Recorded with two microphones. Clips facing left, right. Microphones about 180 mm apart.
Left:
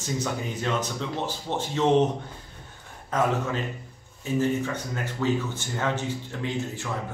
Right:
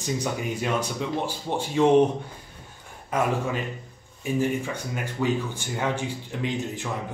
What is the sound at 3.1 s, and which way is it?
Speech, 10° right (ahead or behind).